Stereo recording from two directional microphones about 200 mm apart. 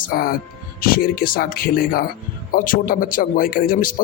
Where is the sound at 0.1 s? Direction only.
45° left (ahead or behind).